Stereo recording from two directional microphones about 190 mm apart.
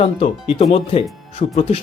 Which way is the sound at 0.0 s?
30° left (ahead or behind).